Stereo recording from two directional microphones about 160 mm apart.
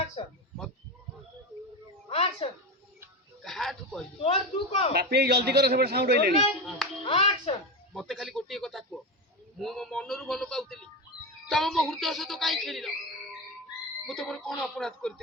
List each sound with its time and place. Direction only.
0.2 s speech: 35° left (ahead or behind)
2.0 s speech: 40° left (ahead or behind)
3.4 s speech: centre (ahead or behind)
4.2 s speech: 40° left (ahead or behind)
4.9 s a man's voice: 85° right
7.0 s speech: 35° left (ahead or behind)
7.9 s speech: centre (ahead or behind)
14.1 s speech: centre (ahead or behind)